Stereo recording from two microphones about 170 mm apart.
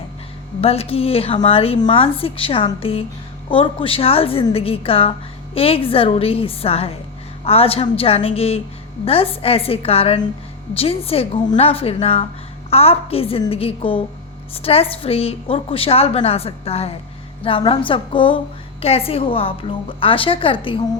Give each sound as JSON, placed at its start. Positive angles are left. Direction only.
{"t": 0.6, "sound": "a woman's voice", "side_deg": 35}